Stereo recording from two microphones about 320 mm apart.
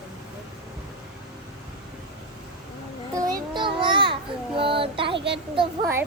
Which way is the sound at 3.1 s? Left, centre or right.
Centre.